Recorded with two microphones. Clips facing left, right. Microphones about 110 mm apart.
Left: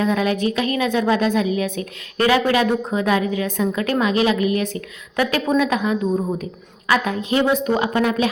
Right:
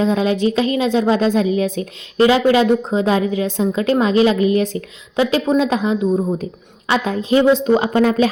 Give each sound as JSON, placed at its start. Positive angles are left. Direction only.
{"t": 0.0, "sound": "a woman's voice", "side_deg": -25}